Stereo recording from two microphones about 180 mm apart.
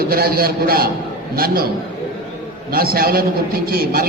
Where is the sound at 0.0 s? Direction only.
55° right (ahead or behind).